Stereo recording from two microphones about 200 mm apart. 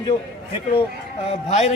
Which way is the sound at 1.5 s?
35° left (ahead or behind).